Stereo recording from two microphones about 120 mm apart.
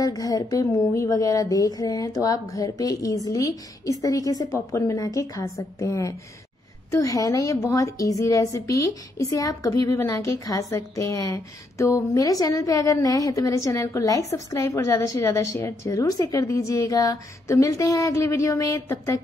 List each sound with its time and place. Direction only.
0.0 s a woman's voice: 30° left (ahead or behind)